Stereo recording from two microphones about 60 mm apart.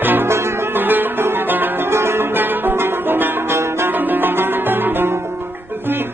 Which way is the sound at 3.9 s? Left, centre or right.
Right.